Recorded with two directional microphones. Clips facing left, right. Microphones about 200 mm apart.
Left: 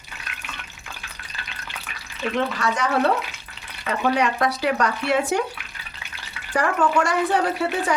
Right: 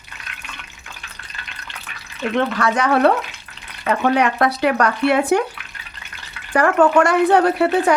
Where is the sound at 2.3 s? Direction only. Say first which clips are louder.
Right 5 dB; 65° right (ahead or behind).